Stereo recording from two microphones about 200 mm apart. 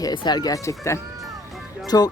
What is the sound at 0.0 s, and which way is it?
Speech, 20° left (ahead or behind).